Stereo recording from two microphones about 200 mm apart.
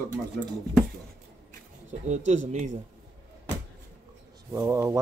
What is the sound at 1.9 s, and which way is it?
Speech, 35° right (ahead or behind).